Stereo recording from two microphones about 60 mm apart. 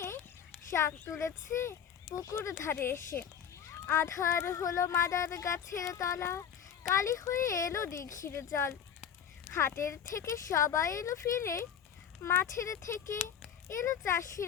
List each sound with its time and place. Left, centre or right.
0.7 s speech: left